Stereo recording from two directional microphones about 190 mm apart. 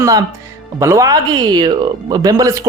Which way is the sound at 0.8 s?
15° right (ahead or behind).